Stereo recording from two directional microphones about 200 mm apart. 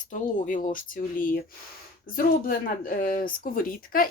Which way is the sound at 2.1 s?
45° left (ahead or behind).